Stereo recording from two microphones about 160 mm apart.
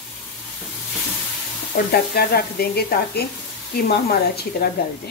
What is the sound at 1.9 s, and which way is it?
Speech, 75° left (ahead or behind).